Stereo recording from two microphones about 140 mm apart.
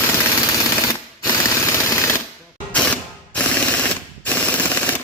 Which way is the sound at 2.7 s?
10° left (ahead or behind).